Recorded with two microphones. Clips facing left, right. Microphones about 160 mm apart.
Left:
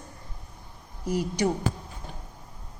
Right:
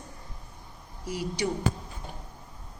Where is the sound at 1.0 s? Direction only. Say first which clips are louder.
Left 5 dB; 45° left (ahead or behind).